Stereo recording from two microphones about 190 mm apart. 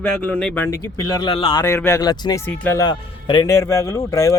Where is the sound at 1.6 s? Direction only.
15° left (ahead or behind).